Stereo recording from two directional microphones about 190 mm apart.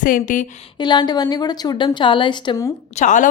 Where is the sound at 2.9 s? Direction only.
40° left (ahead or behind).